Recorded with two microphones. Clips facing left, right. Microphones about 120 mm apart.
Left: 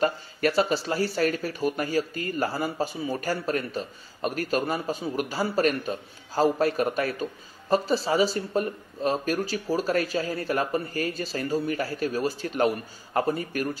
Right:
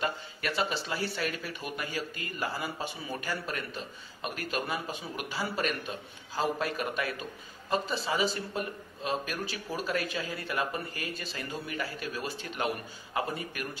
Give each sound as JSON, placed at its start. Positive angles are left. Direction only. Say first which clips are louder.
{"t": 0.0, "sound": "speech", "louder": "left 9 dB", "side_deg": 40}